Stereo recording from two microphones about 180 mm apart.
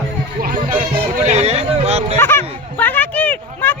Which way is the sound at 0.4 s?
45° right (ahead or behind).